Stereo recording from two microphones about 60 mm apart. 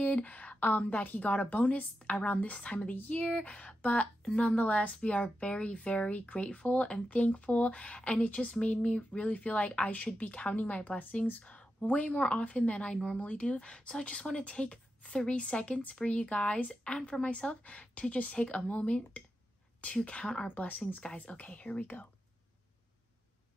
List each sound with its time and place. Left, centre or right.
0.0 s speech: left
20.4 s speech: left
21.0 s speech: centre